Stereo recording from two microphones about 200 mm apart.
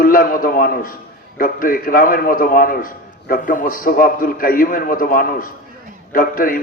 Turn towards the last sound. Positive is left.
turn(degrees=45)  # may be behind; listen again after turning